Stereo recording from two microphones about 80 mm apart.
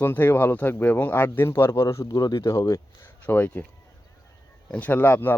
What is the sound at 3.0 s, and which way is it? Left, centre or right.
Speech, left.